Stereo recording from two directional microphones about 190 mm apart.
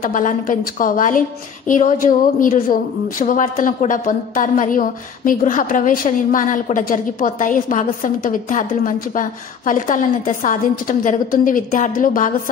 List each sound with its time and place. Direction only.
0.0 s a woman's voice: 45° left (ahead or behind)